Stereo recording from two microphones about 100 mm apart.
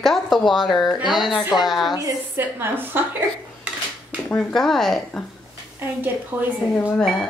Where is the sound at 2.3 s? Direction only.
20° right (ahead or behind).